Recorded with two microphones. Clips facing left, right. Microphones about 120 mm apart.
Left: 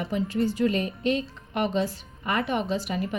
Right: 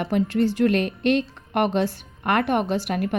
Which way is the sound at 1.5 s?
60° right (ahead or behind).